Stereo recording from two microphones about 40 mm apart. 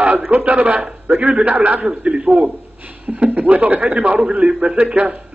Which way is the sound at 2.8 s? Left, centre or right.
Right.